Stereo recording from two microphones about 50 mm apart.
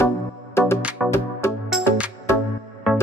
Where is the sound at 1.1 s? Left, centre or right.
Left.